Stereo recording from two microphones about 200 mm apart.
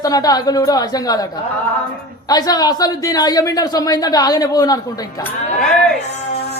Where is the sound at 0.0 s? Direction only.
20° left (ahead or behind).